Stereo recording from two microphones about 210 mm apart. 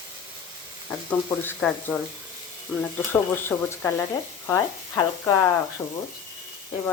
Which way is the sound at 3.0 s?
10° left (ahead or behind).